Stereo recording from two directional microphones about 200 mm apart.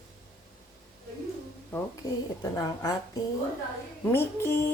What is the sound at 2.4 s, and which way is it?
Speech, 20° left (ahead or behind).